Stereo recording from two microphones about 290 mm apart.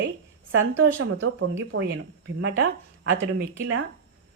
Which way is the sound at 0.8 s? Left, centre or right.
Right.